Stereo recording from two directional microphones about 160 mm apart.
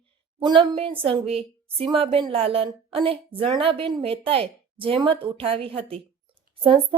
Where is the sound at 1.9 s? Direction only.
25° right (ahead or behind).